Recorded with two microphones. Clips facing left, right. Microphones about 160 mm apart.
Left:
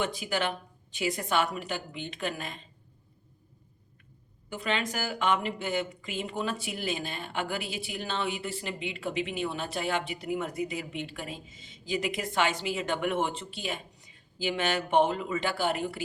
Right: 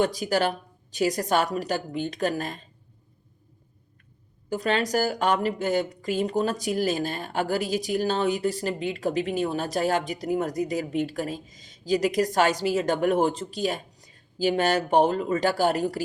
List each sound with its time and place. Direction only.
0.0 s speech: 40° right (ahead or behind)
4.4 s speech: 40° right (ahead or behind)